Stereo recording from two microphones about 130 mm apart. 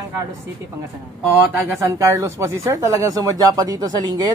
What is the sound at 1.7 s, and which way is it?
Speech, 20° right (ahead or behind).